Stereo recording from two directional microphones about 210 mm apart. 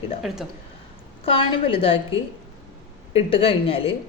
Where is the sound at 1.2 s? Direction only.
25° left (ahead or behind).